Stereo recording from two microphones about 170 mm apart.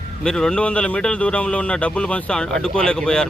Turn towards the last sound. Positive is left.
turn(degrees=5)  # may be behind; listen again after turning